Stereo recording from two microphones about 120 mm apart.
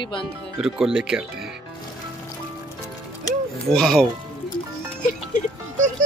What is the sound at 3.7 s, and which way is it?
Speech, centre (ahead or behind).